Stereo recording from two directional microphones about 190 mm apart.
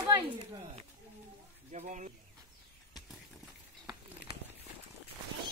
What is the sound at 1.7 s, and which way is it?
Speech, 40° right (ahead or behind).